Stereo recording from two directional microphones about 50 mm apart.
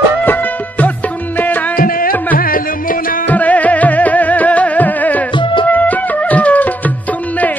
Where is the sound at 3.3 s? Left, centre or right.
Left.